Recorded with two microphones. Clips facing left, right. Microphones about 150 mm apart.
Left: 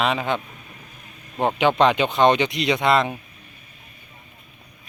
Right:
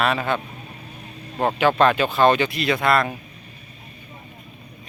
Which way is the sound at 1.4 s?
15° left (ahead or behind).